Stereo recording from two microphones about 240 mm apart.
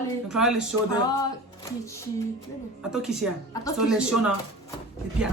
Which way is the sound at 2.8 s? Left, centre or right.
Centre.